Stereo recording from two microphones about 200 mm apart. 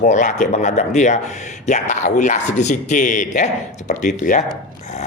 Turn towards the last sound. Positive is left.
turn(degrees=40)  # may be behind; listen again after turning